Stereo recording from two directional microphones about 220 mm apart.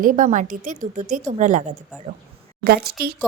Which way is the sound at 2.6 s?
45° right (ahead or behind).